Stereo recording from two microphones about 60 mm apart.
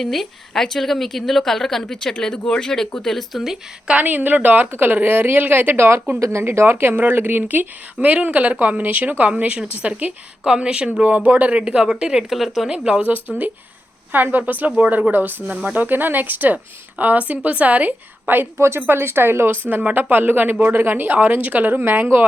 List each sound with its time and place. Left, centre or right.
0.0 s a woman's voice: centre
3.8 s a woman's voice: right
11.6 s a woman's voice: centre
12.7 s a woman's voice: centre; by 19.5 s right
19.6 s speech: right